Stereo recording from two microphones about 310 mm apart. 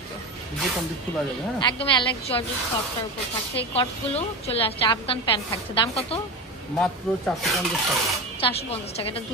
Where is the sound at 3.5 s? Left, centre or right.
Centre.